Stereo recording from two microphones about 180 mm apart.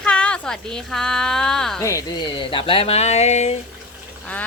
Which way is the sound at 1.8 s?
15° left (ahead or behind).